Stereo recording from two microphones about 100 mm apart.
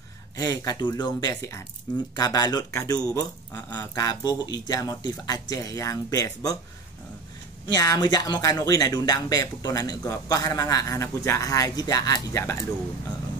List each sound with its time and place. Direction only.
0.4 s speech: 35° left (ahead or behind)
7.6 s speech: 40° left (ahead or behind)